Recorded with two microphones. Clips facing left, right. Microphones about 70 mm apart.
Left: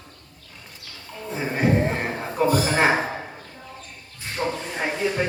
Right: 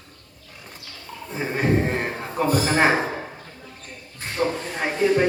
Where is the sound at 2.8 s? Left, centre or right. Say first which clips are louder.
Right 2 dB; centre.